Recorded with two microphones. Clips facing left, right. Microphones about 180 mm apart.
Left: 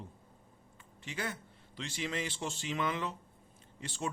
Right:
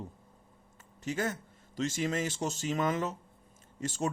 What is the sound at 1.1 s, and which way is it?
Speech, 45° right (ahead or behind).